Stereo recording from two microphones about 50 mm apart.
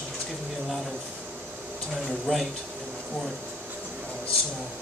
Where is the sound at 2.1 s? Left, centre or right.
Centre.